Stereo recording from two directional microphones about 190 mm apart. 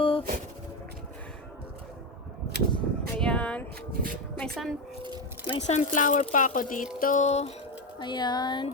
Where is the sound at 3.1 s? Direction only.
5° left (ahead or behind).